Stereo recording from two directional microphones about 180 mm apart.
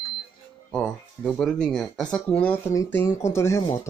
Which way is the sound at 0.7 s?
5° left (ahead or behind).